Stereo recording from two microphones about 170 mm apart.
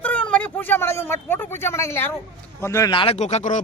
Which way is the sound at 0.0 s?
5° left (ahead or behind).